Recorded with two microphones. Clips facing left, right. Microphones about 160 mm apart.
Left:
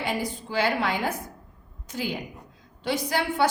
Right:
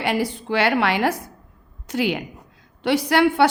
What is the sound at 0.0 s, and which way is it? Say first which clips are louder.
A woman's voice: right 6 dB; 75° right (ahead or behind).